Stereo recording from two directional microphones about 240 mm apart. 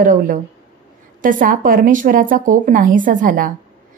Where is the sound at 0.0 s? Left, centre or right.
Right.